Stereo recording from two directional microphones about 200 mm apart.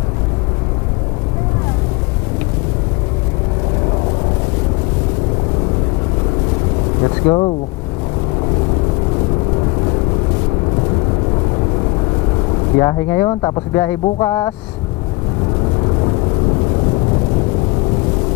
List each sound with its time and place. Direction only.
7.2 s speech: 25° left (ahead or behind)
12.7 s speech: 15° left (ahead or behind)